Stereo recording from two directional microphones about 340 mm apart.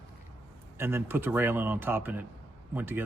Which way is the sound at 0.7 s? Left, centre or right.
Centre.